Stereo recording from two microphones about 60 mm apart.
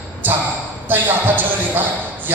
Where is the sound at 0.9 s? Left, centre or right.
Right.